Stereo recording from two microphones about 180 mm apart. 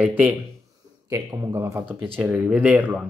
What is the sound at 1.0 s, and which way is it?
Speech, 20° right (ahead or behind).